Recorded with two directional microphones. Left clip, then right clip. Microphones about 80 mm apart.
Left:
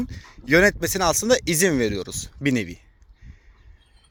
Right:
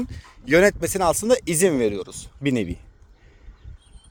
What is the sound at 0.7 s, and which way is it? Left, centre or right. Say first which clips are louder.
Speech: right 1 dB; right.